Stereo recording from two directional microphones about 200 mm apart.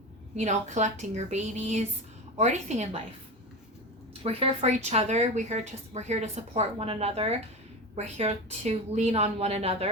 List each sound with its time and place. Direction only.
0.3 s a woman's voice: 35° right (ahead or behind)
4.2 s a woman's voice: 30° right (ahead or behind)